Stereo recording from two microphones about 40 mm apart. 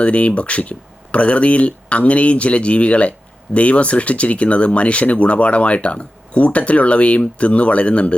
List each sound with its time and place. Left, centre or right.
0.0 s speech: left